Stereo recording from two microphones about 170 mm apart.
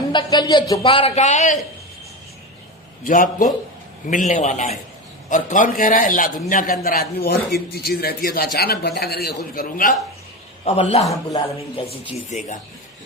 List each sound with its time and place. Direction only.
0.1 s speech: 25° left (ahead or behind); by 1.5 s 45° left (ahead or behind)
3.0 s a man's voice: 50° left (ahead or behind)
10.7 s a man's voice: 40° left (ahead or behind)
11.3 s speech: 20° left (ahead or behind)
12.3 s a man's voice: 45° left (ahead or behind)